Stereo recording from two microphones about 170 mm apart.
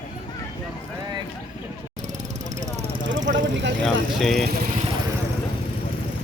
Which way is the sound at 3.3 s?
90° right.